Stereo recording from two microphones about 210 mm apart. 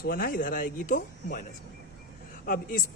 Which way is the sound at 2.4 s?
40° left (ahead or behind).